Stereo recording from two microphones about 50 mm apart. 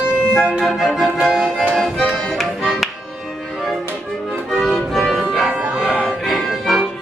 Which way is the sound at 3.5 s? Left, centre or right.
Centre.